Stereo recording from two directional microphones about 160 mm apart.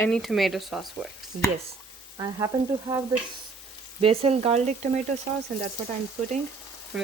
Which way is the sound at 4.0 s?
40° right (ahead or behind).